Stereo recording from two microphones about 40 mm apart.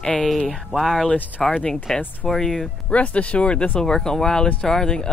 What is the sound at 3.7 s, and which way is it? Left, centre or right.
Speech, centre.